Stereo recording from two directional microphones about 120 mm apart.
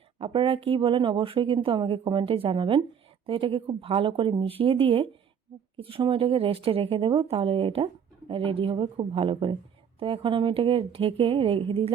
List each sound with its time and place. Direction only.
0.2 s a woman's voice: 45° right (ahead or behind)